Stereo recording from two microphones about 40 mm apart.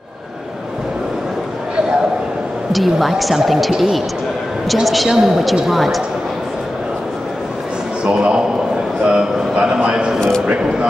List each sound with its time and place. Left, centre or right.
2.7 s speech: centre
4.8 s a woman's voice: centre
8.0 s a man's voice: right
9.0 s a sound: right
10.4 s speech: right